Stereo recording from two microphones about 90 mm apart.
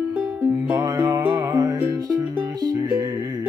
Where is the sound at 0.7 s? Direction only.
45° right (ahead or behind).